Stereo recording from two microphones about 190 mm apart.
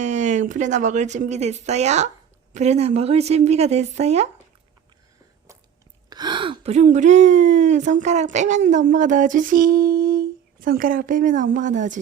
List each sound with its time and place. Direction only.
0.0 s a woman's voice: 40° right (ahead or behind)
6.1 s speech: 20° right (ahead or behind); by 8.8 s 40° right (ahead or behind)
8.9 s a sound: 40° right (ahead or behind)